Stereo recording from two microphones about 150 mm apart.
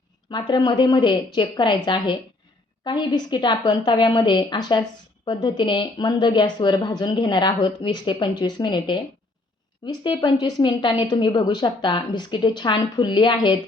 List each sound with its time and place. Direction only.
0.3 s a woman's voice: 30° left (ahead or behind)